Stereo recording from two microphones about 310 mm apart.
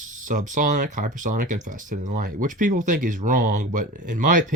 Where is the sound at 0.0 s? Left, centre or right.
Right.